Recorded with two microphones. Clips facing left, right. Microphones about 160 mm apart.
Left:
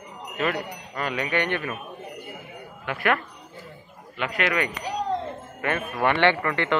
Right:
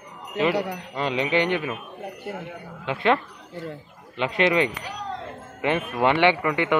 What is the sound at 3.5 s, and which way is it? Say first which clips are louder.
Speech: right 13 dB; 80° right.